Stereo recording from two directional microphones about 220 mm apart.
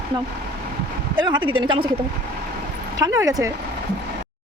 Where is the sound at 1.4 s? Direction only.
70° right (ahead or behind).